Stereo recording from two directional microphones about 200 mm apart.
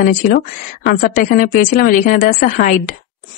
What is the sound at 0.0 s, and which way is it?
A woman's voice, 40° left (ahead or behind).